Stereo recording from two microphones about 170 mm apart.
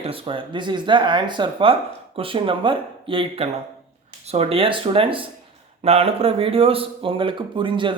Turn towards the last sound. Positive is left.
turn(degrees=-30)  # may be behind; listen again after turning